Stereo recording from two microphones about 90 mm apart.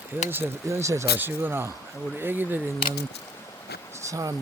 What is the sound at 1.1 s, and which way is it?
Speech, 25° right (ahead or behind).